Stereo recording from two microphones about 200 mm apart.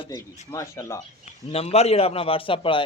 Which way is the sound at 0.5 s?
15° left (ahead or behind).